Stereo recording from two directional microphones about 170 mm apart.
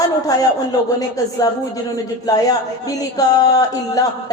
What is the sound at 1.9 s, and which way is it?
A man's voice, 20° left (ahead or behind).